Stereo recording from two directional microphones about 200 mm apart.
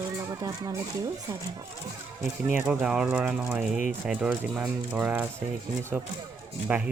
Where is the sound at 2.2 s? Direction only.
10° right (ahead or behind).